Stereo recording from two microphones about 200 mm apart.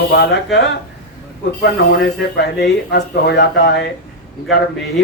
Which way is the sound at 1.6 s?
55° left (ahead or behind).